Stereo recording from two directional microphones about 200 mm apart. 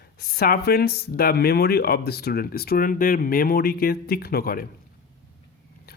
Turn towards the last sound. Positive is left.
turn(degrees=45)  # may be behind; listen again after turning